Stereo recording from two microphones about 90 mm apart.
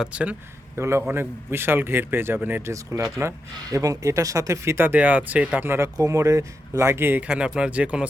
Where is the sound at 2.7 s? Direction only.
35° right (ahead or behind); by 5.7 s 15° right (ahead or behind).